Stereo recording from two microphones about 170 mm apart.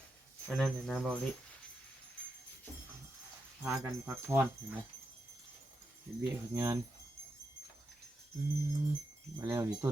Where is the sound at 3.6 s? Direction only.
10° right (ahead or behind).